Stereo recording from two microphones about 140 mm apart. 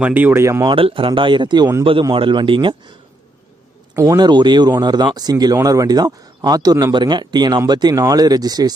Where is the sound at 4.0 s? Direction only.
25° right (ahead or behind).